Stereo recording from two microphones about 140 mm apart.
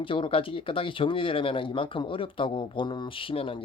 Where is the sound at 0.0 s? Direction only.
40° left (ahead or behind).